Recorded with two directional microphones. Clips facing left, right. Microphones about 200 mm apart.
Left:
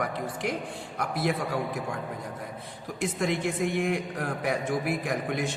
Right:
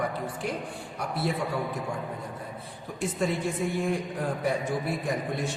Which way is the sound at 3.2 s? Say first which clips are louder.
Even; 80° left.